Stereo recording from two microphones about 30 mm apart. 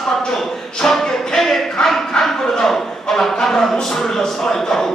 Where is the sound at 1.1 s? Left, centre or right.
Centre.